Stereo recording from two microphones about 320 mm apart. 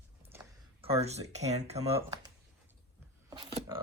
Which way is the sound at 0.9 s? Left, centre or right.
Centre.